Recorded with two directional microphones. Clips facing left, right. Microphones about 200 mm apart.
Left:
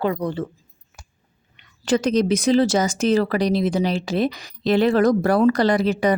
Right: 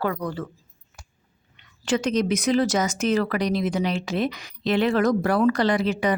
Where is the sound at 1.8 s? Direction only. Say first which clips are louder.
Left 4 dB; 35° left (ahead or behind).